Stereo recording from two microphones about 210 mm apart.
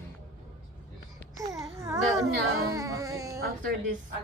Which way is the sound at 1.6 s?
15° right (ahead or behind).